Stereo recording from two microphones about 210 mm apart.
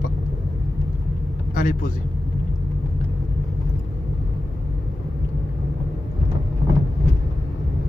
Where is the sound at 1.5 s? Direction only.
40° left (ahead or behind).